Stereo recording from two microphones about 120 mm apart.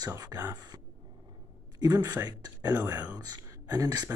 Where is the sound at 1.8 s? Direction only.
35° right (ahead or behind).